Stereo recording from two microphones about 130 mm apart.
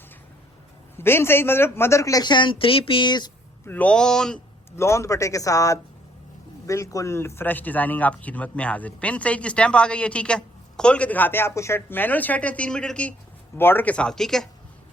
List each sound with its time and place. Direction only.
0.9 s a man's voice: 20° left (ahead or behind); by 3.3 s 35° left (ahead or behind)
3.7 s a man's voice: 10° left (ahead or behind)
4.8 s a man's voice: 25° left (ahead or behind); by 14.4 s 5° left (ahead or behind)